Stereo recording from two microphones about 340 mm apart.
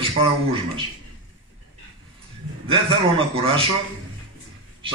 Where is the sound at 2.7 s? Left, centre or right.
Centre.